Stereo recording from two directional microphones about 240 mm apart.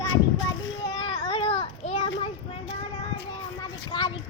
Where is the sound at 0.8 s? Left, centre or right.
Centre.